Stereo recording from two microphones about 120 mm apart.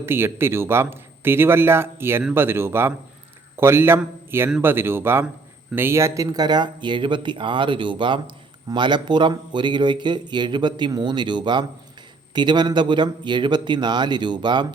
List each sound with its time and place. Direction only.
0.0 s a man's voice: 20° right (ahead or behind); by 14.7 s 40° right (ahead or behind)